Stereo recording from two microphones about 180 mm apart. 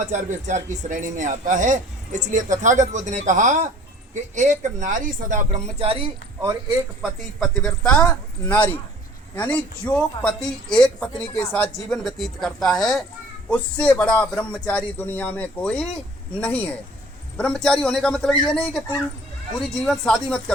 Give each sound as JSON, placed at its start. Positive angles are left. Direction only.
{"t": 0.0, "sound": "a man's voice", "side_deg": -40}
{"t": 6.4, "sound": "speech", "side_deg": -20}
{"t": 7.0, "sound": "a man's voice", "side_deg": 0}